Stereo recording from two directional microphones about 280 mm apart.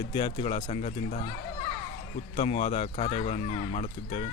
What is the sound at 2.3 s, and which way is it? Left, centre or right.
Speech, left.